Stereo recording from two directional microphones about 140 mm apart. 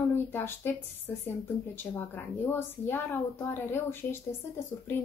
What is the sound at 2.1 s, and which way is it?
Speech, 15° left (ahead or behind).